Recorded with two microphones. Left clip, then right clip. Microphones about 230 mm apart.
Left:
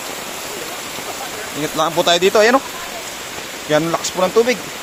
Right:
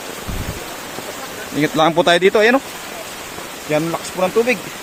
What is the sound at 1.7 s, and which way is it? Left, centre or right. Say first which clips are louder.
Speech: right 2 dB; right.